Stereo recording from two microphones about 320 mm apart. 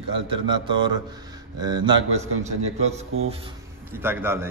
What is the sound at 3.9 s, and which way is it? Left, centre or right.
Speech, centre.